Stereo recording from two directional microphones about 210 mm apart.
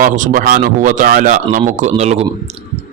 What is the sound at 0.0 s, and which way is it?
Speech, 40° right (ahead or behind).